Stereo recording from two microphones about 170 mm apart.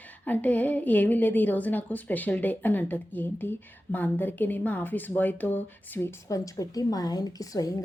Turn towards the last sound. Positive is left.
turn(degrees=20)  # may be behind; listen again after turning